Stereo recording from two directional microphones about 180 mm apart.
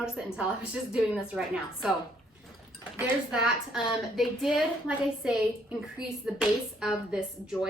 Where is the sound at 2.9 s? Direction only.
5° right (ahead or behind).